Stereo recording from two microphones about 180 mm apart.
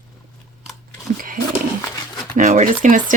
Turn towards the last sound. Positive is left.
turn(degrees=-45)  # may be behind; listen again after turning